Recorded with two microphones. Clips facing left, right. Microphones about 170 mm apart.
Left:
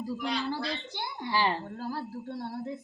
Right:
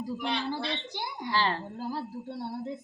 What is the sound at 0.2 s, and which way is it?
Speech, 25° right (ahead or behind).